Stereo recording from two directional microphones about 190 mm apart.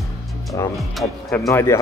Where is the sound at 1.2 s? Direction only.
15° left (ahead or behind).